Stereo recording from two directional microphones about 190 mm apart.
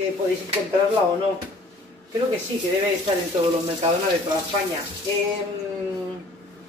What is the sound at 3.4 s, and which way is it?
Speech, 35° right (ahead or behind).